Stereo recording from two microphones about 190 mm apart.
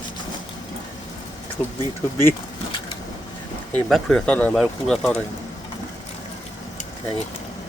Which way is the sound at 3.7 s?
5° left (ahead or behind).